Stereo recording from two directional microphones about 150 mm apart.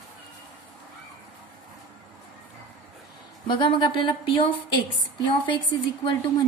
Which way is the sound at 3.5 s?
35° left (ahead or behind).